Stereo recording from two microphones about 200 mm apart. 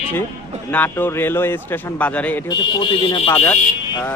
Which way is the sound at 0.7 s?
10° left (ahead or behind).